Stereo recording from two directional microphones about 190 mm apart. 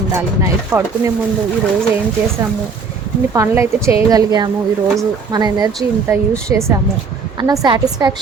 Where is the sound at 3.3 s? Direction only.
15° right (ahead or behind).